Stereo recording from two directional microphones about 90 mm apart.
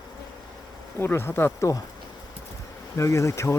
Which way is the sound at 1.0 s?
25° left (ahead or behind).